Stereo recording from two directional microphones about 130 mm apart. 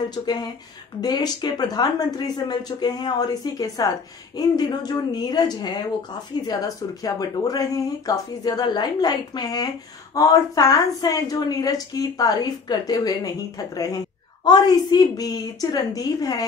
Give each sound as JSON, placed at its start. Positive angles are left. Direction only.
{"t": 0.1, "sound": "a woman's voice", "side_deg": 30}
{"t": 14.4, "sound": "a woman's voice", "side_deg": 35}